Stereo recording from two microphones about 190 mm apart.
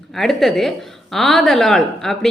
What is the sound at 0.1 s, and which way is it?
A woman's voice, centre (ahead or behind).